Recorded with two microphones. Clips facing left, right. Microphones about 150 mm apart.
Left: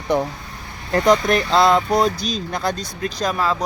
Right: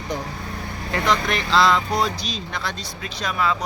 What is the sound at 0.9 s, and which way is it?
Speech, 45° left (ahead or behind).